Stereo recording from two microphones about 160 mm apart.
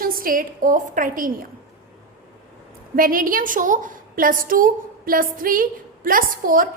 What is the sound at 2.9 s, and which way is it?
A woman's voice, 60° right (ahead or behind).